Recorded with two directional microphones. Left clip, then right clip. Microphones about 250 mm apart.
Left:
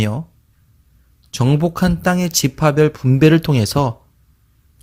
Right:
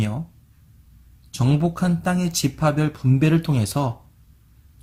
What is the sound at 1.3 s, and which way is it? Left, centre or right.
Speech, left.